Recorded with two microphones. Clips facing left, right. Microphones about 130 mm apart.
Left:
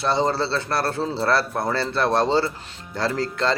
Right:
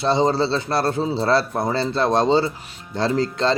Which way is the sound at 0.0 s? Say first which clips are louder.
Right 3 dB; 20° right (ahead or behind).